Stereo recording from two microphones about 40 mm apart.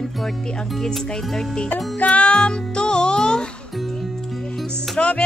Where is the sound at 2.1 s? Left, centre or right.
Left.